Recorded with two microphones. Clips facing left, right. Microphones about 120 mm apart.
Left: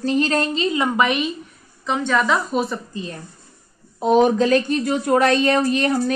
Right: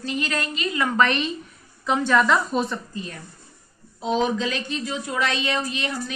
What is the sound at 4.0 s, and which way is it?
A woman's voice, 50° left (ahead or behind).